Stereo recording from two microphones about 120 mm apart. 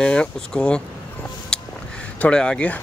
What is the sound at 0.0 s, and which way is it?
Speech, 10° left (ahead or behind).